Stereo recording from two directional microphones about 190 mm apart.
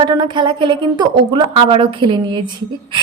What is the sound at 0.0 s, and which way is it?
A woman's voice, 25° right (ahead or behind).